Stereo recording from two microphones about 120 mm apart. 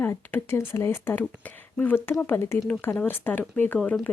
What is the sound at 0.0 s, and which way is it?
Speech, 15° left (ahead or behind).